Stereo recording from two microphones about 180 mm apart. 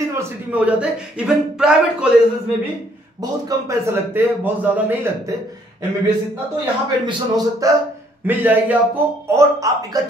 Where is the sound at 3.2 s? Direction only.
20° right (ahead or behind).